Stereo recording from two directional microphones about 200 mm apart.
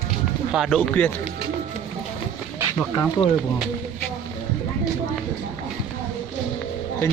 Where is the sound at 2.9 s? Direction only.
20° left (ahead or behind).